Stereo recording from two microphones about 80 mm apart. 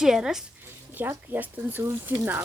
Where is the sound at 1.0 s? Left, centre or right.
Right.